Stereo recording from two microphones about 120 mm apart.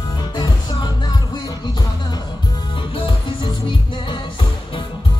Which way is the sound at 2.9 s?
45° left (ahead or behind).